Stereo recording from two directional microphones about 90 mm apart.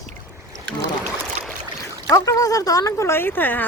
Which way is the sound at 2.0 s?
40° left (ahead or behind).